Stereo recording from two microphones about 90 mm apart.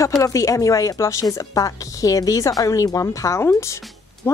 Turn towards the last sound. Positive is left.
turn(degrees=30)  # may be behind; listen again after turning